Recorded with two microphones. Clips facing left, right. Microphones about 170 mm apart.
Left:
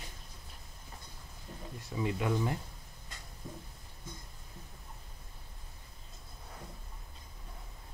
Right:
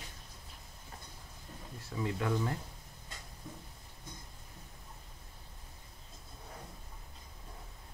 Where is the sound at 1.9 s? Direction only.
15° left (ahead or behind).